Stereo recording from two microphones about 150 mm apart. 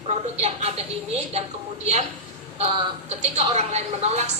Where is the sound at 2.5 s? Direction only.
45° right (ahead or behind).